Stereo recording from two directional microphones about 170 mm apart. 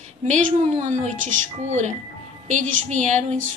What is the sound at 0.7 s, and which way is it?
Speech, 50° right (ahead or behind).